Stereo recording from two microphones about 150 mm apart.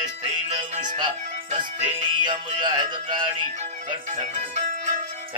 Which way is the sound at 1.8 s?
30° right (ahead or behind).